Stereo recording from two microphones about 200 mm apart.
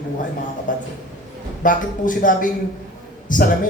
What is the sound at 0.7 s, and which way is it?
A man's voice, 40° left (ahead or behind).